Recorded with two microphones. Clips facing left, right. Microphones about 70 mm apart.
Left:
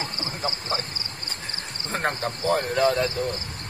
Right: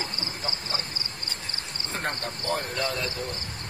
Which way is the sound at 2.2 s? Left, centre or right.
Left.